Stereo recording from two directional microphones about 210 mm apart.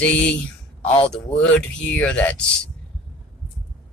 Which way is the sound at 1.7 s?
5° left (ahead or behind).